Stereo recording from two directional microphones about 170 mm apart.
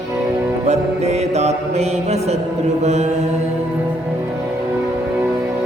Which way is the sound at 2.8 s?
40° right (ahead or behind).